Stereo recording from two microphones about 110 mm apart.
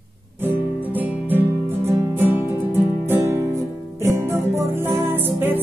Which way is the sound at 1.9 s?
20° right (ahead or behind).